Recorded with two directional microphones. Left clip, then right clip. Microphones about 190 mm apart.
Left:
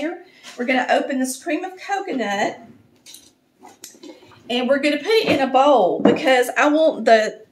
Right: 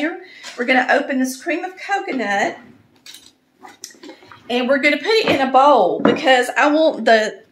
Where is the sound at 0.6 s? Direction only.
Centre (ahead or behind).